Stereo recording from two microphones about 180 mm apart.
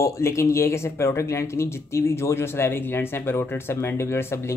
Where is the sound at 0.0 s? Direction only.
15° left (ahead or behind).